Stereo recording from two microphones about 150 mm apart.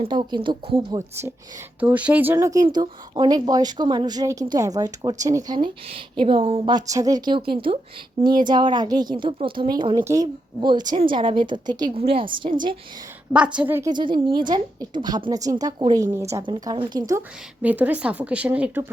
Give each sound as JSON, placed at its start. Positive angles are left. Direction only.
{"t": 0.0, "sound": "a woman's voice", "side_deg": -35}
{"t": 0.9, "sound": "speech", "side_deg": -15}
{"t": 2.6, "sound": "a woman's voice", "side_deg": -30}
{"t": 5.5, "sound": "a woman's voice", "side_deg": -35}
{"t": 13.3, "sound": "speech", "side_deg": -5}
{"t": 13.9, "sound": "a woman's voice", "side_deg": -30}
{"t": 17.6, "sound": "speech", "side_deg": -10}